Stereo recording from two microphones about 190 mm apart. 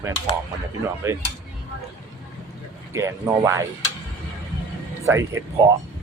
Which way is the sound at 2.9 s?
15° right (ahead or behind).